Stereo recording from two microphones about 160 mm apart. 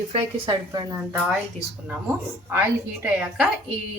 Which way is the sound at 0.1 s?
40° right (ahead or behind).